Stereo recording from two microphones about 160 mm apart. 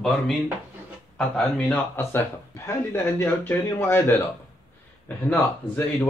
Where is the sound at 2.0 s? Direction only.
15° left (ahead or behind).